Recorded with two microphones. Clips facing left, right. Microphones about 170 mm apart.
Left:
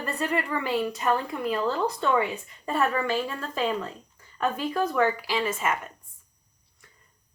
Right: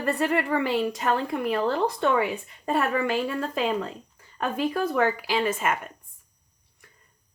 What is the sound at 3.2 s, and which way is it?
Speech, 45° right (ahead or behind).